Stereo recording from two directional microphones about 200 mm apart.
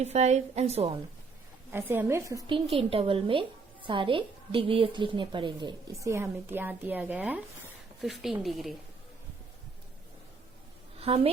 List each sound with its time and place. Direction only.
0.0 s a woman's voice: 35° right (ahead or behind)
1.7 s a woman's voice: 10° right (ahead or behind)
11.0 s a woman's voice: 30° right (ahead or behind)